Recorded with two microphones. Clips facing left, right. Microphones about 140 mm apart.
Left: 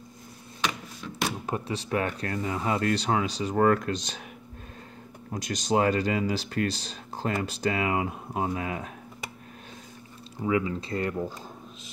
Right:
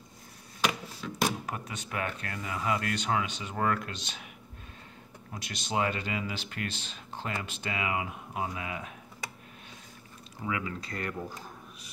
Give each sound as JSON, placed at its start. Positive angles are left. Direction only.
{"t": 1.4, "sound": "speech", "side_deg": 30}
{"t": 5.3, "sound": "speech", "side_deg": 40}
{"t": 10.4, "sound": "speech", "side_deg": 25}